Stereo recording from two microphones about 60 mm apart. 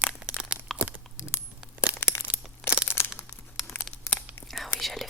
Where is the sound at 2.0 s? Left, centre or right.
Left.